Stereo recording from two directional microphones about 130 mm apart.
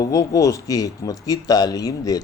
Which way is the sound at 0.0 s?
25° left (ahead or behind).